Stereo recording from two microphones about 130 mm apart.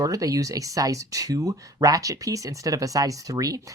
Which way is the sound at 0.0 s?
25° right (ahead or behind).